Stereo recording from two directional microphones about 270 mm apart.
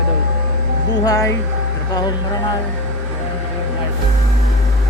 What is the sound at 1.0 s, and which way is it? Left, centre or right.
Speech, centre.